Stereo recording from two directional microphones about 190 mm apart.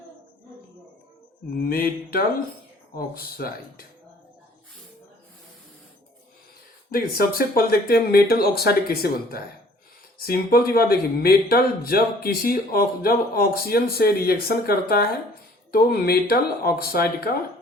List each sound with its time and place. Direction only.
1.5 s speech: 50° left (ahead or behind)
6.9 s speech: 50° left (ahead or behind)